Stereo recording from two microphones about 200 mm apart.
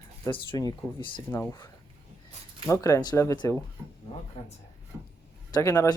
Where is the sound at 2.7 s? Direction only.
15° left (ahead or behind).